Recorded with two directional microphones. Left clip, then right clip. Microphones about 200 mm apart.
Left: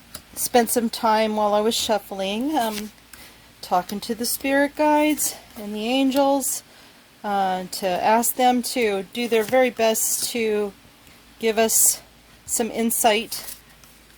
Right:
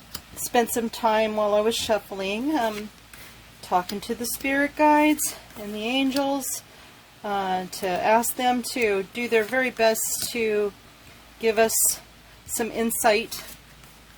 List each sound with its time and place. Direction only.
0.5 s speech: 35° left (ahead or behind)
4.0 s a woman's voice: 35° left (ahead or behind)